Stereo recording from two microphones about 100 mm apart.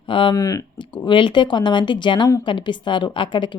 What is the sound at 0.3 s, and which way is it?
Speech, 35° left (ahead or behind).